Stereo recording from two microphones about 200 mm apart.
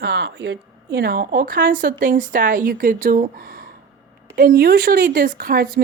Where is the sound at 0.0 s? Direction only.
50° right (ahead or behind).